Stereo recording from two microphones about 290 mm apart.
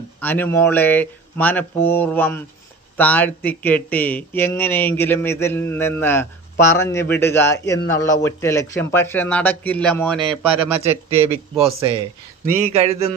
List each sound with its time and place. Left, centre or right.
0.2 s speech: centre
10.2 s speech: centre
10.8 s a man's voice: centre
12.7 s speech: right